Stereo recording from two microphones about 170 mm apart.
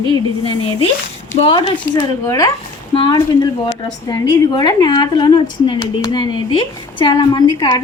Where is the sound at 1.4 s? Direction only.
35° left (ahead or behind).